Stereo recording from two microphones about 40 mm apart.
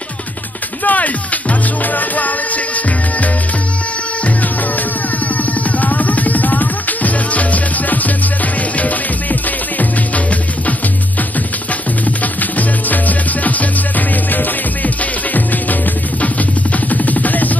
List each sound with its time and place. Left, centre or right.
0.8 s music: left
12.2 s music: left